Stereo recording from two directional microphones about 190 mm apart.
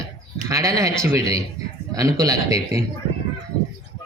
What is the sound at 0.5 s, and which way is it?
A woman's voice, 15° right (ahead or behind).